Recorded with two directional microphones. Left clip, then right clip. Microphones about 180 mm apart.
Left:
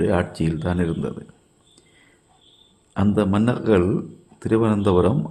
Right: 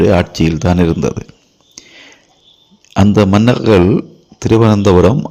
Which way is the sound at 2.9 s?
40° right (ahead or behind).